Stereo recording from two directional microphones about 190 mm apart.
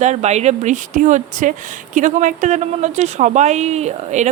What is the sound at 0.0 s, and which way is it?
Speech, 35° right (ahead or behind).